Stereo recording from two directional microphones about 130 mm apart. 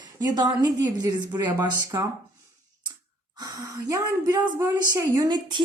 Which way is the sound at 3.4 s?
25° right (ahead or behind).